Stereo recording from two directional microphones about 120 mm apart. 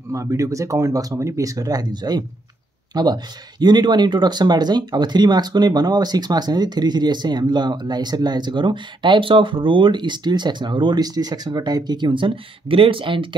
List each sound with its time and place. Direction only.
0.1 s speech: 25° right (ahead or behind); by 13.4 s 45° right (ahead or behind)